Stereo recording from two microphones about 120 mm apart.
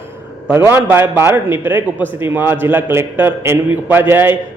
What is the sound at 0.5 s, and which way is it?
A man's voice, 20° right (ahead or behind).